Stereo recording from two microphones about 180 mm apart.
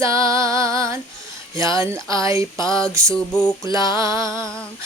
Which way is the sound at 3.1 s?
5° left (ahead or behind).